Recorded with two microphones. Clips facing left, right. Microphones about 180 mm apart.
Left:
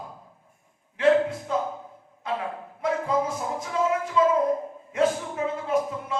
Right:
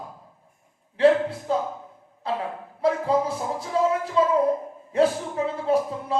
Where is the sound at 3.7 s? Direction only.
35° right (ahead or behind).